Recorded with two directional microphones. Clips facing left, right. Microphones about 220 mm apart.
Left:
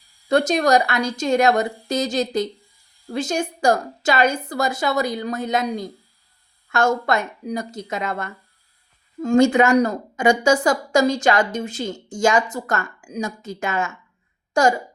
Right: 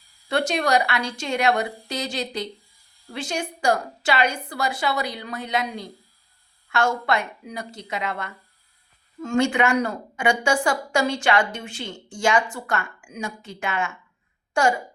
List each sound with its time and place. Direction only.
0.3 s a woman's voice: 40° left (ahead or behind)